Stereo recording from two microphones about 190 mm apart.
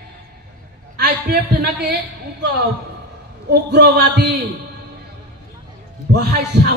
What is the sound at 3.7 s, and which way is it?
Speech, 60° right (ahead or behind).